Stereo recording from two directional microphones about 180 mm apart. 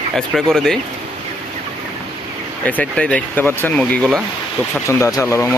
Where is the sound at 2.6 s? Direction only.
10° left (ahead or behind).